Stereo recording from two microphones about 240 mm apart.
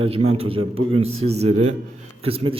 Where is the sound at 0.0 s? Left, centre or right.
Right.